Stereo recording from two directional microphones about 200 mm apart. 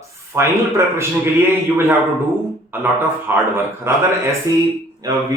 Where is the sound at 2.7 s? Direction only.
10° right (ahead or behind).